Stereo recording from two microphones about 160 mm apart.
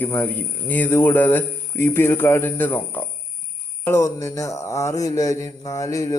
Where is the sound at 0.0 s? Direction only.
10° left (ahead or behind).